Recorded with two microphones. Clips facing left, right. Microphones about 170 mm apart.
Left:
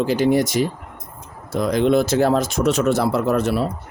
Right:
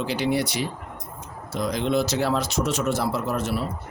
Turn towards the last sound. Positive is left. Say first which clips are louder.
# left 7 dB
turn(degrees=65)  # may be behind; listen again after turning